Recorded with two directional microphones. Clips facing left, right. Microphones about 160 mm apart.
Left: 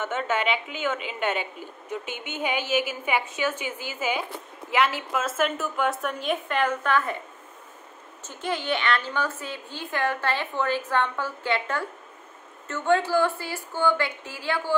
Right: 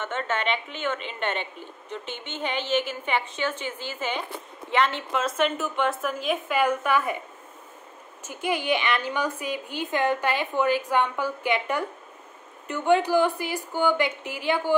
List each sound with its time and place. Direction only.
0.0 s a woman's voice: 5° left (ahead or behind)
6.6 s a woman's voice: 10° right (ahead or behind)
8.2 s a woman's voice: 10° right (ahead or behind)